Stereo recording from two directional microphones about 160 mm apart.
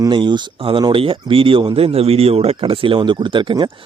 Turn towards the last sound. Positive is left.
turn(degrees=-30)  # may be behind; listen again after turning